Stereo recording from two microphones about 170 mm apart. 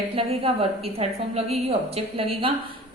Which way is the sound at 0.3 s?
35° right (ahead or behind).